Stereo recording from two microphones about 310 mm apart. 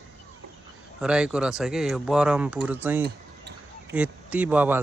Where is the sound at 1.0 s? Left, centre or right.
Centre.